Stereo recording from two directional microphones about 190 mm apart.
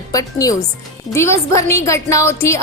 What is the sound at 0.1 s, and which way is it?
A woman's voice, 20° left (ahead or behind).